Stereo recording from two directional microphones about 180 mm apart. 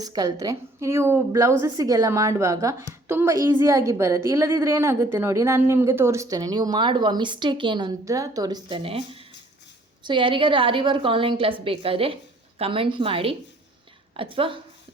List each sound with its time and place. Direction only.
0.0 s a woman's voice: 20° right (ahead or behind)